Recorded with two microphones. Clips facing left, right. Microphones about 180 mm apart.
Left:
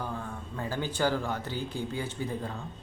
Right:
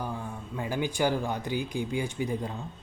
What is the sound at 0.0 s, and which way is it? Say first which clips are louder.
Speech: right 1 dB; 15° right (ahead or behind).